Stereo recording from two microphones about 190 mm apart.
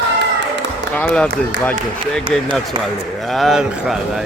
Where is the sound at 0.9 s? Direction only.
5° left (ahead or behind).